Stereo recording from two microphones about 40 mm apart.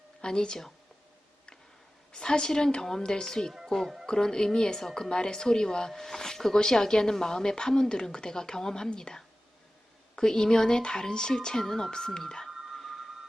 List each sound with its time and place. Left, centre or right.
0.2 s a woman's voice: centre
2.1 s a woman's voice: centre
4.0 s a woman's voice: centre
12.5 s music: centre
12.7 s a sound: centre